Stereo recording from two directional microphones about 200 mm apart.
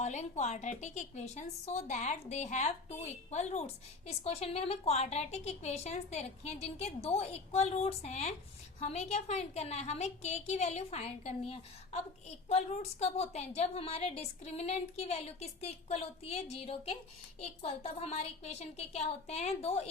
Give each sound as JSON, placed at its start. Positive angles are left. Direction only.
{"t": 0.0, "sound": "a woman's voice", "side_deg": 35}